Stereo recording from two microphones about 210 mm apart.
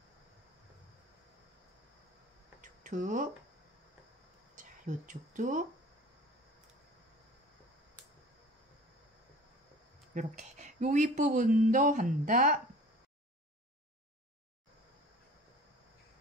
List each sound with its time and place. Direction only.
2.6 s a sound: 40° right (ahead or behind)
4.6 s speech: 40° right (ahead or behind)
10.1 s speech: 35° right (ahead or behind)